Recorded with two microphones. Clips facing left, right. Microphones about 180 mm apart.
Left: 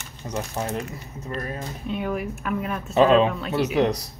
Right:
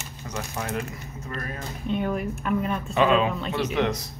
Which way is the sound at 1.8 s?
5° left (ahead or behind).